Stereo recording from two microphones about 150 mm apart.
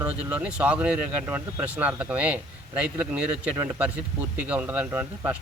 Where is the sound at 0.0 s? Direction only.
10° right (ahead or behind).